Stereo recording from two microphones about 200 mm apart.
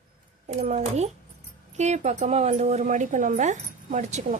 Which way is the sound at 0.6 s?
35° right (ahead or behind).